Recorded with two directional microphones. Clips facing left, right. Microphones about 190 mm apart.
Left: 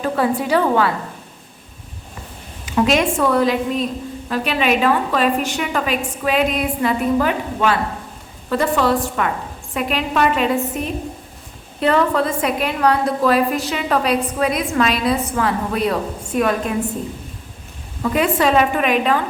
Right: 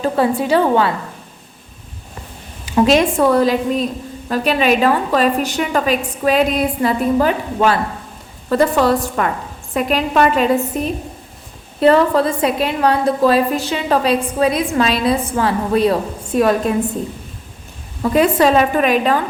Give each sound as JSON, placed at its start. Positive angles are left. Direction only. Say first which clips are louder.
{"t": 0.0, "sound": "a woman's voice", "louder": "right 3 dB", "side_deg": -25}
{"t": 2.7, "sound": "a woman's voice", "louder": "right 4 dB", "side_deg": -35}
{"t": 18.0, "sound": "a woman's voice", "louder": "right 4 dB", "side_deg": -35}